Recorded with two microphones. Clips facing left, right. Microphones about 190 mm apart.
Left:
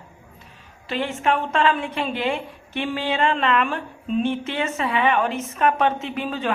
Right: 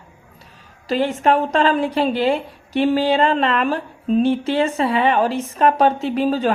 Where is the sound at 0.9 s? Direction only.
35° right (ahead or behind).